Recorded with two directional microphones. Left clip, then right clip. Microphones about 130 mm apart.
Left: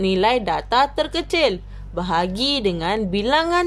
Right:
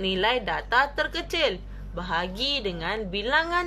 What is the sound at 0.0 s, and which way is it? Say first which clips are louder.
A woman's voice: left 6 dB; 35° left (ahead or behind).